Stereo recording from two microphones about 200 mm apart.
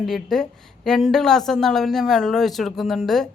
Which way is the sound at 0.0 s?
Centre (ahead or behind).